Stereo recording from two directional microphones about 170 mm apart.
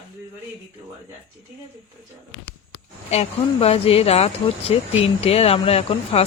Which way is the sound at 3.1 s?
35° left (ahead or behind).